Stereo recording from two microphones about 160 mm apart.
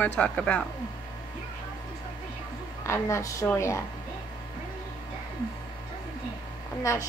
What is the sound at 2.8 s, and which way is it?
Speech, 15° left (ahead or behind).